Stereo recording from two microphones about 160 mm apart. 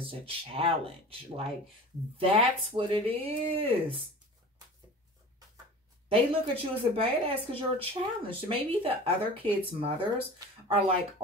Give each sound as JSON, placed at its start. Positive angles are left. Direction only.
{"t": 0.0, "sound": "speech", "side_deg": -35}
{"t": 6.0, "sound": "speech", "side_deg": -35}